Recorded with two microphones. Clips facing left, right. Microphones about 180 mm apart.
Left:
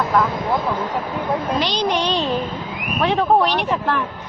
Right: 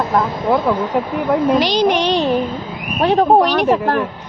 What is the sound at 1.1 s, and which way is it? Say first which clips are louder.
Speech: right 5 dB; 75° right (ahead or behind).